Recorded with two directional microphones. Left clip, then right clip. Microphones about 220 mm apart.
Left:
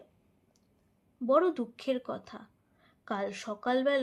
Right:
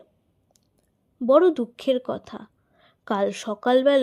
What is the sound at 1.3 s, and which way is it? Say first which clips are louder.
A woman's voice: right 9 dB; 45° right (ahead or behind).